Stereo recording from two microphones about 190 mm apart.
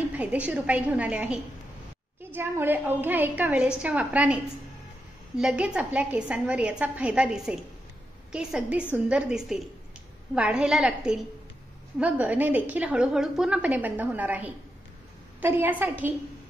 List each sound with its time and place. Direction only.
0.1 s a woman's voice: 5° right (ahead or behind)
5.4 s a woman's voice: 5° right (ahead or behind)